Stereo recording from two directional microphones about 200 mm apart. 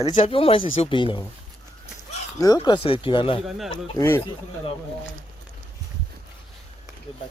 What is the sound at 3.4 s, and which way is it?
Speech, centre (ahead or behind).